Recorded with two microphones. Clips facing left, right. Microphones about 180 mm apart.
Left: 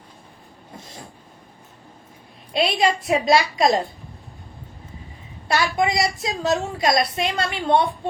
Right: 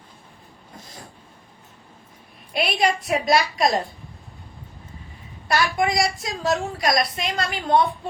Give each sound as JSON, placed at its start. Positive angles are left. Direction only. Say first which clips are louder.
{"t": 0.8, "sound": "train", "louder": "left 2 dB", "side_deg": 25}
{"t": 2.5, "sound": "a woman's voice", "louder": "left 2 dB", "side_deg": 25}
{"t": 5.5, "sound": "a woman's voice", "louder": "left 1 dB", "side_deg": 25}